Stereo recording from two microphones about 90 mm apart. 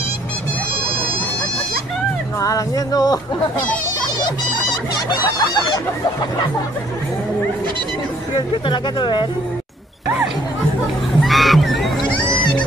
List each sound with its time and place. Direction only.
2.4 s music: 40° left (ahead or behind)
8.4 s speech: 65° left (ahead or behind)
11.1 s music: centre (ahead or behind)